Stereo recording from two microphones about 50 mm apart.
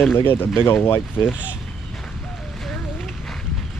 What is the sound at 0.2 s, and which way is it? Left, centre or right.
Speech, left.